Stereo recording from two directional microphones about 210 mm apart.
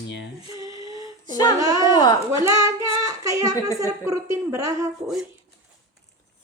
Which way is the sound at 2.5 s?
15° right (ahead or behind).